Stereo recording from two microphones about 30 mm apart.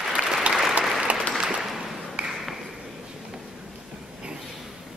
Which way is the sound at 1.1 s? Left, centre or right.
Right.